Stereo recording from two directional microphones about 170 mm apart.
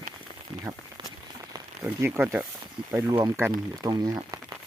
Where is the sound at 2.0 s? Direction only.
10° right (ahead or behind).